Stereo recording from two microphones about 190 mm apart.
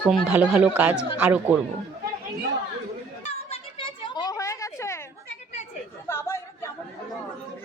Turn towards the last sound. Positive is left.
turn(degrees=15)  # may be behind; listen again after turning